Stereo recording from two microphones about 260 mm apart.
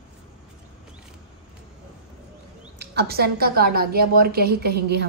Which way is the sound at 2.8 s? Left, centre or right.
Right.